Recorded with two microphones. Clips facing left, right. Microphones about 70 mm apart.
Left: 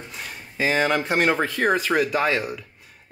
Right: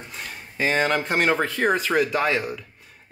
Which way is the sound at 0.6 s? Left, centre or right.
Centre.